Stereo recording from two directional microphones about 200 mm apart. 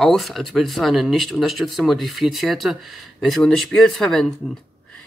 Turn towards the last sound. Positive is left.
turn(degrees=0)  # may be behind; listen again after turning